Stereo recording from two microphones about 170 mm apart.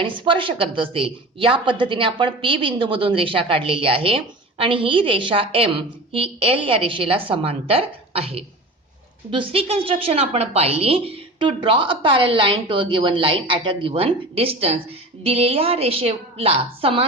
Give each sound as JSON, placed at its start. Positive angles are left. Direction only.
{"t": 0.0, "sound": "a woman's voice", "side_deg": -30}